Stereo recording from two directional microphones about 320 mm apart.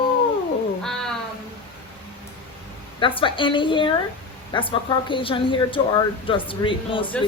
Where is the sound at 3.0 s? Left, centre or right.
Centre.